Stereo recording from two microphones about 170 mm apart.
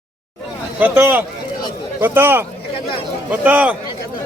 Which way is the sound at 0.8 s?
10° right (ahead or behind).